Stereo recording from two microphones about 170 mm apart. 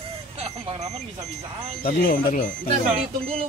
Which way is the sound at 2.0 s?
55° left (ahead or behind).